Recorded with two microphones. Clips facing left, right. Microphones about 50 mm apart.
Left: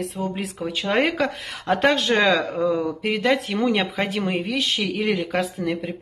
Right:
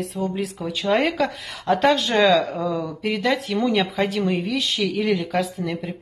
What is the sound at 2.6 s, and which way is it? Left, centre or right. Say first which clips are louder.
Speech: left 3 dB; centre.